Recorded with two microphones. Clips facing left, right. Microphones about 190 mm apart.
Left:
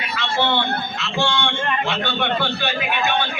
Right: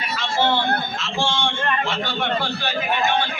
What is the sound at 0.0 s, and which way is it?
A man's voice, 65° left (ahead or behind).